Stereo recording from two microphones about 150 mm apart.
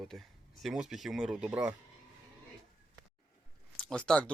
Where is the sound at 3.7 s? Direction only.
5° left (ahead or behind).